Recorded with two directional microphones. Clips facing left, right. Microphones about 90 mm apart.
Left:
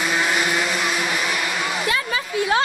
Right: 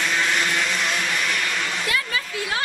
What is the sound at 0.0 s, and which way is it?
Vehicle, 10° left (ahead or behind).